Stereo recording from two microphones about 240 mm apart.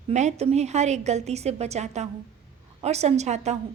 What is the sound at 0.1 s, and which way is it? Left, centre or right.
A woman's voice, right.